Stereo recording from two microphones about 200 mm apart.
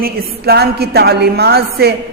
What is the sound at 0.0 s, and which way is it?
A woman's voice, 50° right (ahead or behind).